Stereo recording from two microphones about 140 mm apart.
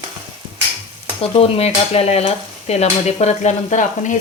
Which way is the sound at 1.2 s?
45° left (ahead or behind).